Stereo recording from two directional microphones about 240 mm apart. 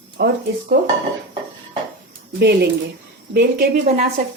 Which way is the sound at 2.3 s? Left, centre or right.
Right.